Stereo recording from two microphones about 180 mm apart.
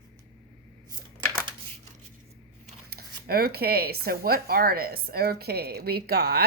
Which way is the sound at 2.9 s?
60° right (ahead or behind).